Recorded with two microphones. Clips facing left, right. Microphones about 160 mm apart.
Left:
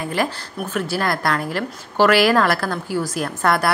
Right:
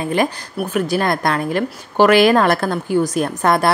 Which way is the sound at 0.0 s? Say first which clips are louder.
Right 4 dB; 20° right (ahead or behind).